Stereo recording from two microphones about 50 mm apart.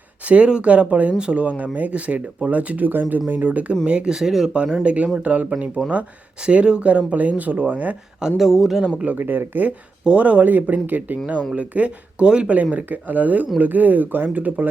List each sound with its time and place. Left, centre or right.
0.3 s speech: right
3.8 s speech: centre
4.5 s speech: right
8.4 s speech: centre
9.1 s speech: right
10.0 s speech: right
12.7 s speech: right